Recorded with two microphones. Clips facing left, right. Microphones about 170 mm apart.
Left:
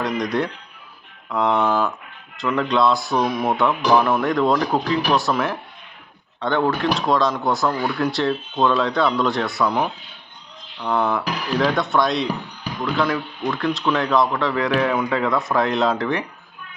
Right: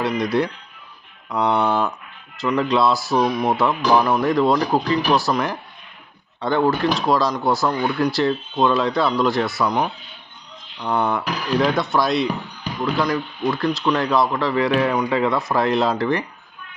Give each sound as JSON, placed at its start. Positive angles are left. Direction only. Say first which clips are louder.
{"t": 0.0, "sound": "speech", "louder": "right 2 dB", "side_deg": -5}
{"t": 1.4, "sound": "speech", "louder": "even", "side_deg": -35}
{"t": 2.3, "sound": "speech", "louder": "right 1 dB", "side_deg": 0}
{"t": 10.9, "sound": "speech", "louder": "even", "side_deg": 0}